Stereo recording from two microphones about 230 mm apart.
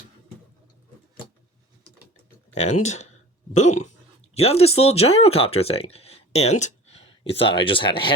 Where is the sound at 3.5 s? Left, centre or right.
Left.